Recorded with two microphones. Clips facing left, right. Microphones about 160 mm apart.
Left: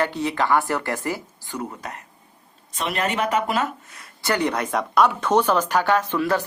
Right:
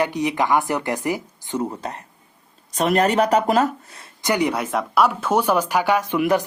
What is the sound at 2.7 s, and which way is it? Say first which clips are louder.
Speech: right 7 dB; 40° right (ahead or behind).